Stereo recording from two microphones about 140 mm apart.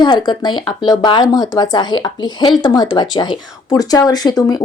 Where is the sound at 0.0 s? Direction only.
35° left (ahead or behind).